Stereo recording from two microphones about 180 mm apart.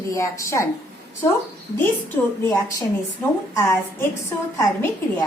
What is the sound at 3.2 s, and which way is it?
Speech, 10° left (ahead or behind).